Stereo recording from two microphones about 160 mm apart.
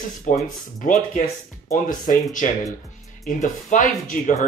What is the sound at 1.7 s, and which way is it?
Speech, 55° left (ahead or behind).